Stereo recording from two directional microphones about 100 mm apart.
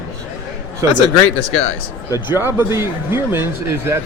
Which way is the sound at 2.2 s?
25° right (ahead or behind).